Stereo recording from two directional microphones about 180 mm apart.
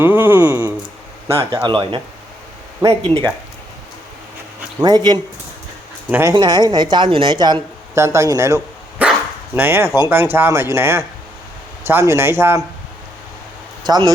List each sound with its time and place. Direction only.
0.0 s speech: 10° right (ahead or behind)
4.8 s speech: 20° right (ahead or behind)
6.1 s speech: 10° right (ahead or behind)
6.3 s speech: 25° right (ahead or behind)